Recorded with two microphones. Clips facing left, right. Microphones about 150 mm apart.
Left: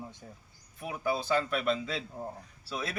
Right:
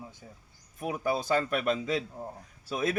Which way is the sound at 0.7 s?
45° right (ahead or behind).